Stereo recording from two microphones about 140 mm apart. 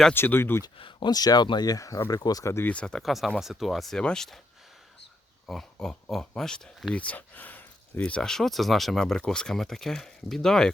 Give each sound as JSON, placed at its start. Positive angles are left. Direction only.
{"t": 0.1, "sound": "speech", "side_deg": 15}
{"t": 0.6, "sound": "speech", "side_deg": 35}
{"t": 5.5, "sound": "speech", "side_deg": 5}